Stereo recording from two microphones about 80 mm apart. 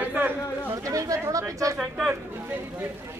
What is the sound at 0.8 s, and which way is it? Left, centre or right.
Speech, right.